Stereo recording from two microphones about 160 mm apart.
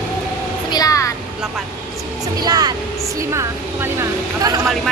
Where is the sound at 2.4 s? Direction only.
25° right (ahead or behind).